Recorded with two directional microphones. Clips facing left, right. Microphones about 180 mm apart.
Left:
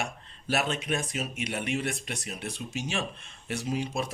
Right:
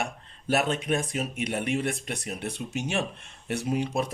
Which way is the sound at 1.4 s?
50° right (ahead or behind).